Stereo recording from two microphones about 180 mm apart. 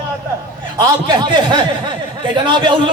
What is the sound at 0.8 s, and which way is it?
Speech, 25° right (ahead or behind).